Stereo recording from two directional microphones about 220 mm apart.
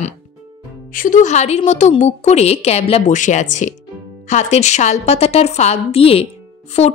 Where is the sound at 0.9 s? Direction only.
35° left (ahead or behind).